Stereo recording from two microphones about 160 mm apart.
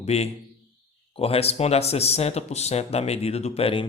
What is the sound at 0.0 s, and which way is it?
A man's voice, 40° left (ahead or behind).